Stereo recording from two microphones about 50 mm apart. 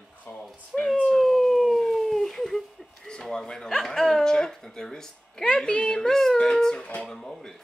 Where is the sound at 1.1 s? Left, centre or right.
Centre.